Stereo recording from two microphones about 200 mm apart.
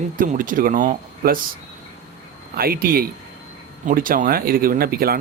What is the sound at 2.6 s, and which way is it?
Speech, 50° right (ahead or behind).